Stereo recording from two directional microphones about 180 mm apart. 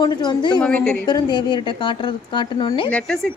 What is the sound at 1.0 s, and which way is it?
A woman's voice, 25° left (ahead or behind).